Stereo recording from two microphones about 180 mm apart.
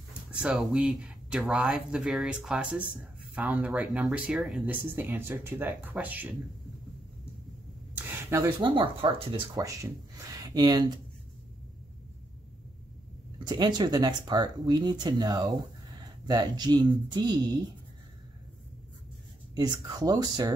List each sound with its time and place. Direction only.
0.4 s speech: 5° right (ahead or behind)
7.9 s speech: 15° right (ahead or behind)
13.5 s speech: 25° right (ahead or behind)
19.5 s speech: 20° right (ahead or behind)